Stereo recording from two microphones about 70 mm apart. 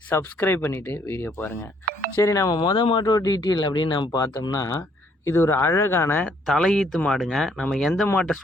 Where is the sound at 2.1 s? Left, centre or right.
Left.